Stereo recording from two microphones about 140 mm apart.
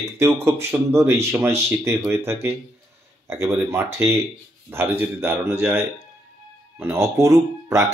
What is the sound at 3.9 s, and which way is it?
Speech, 20° right (ahead or behind).